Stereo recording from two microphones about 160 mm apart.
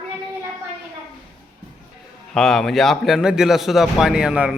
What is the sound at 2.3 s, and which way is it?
A man's voice, centre (ahead or behind).